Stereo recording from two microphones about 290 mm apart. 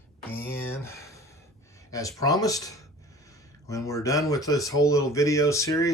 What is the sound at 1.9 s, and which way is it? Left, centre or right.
Speech, centre.